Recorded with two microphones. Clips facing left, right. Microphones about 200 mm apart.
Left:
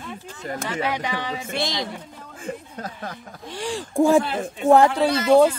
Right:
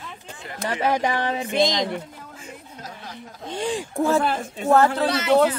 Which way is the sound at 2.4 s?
55° left (ahead or behind).